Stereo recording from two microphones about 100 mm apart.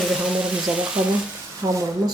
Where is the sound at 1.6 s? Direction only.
35° right (ahead or behind).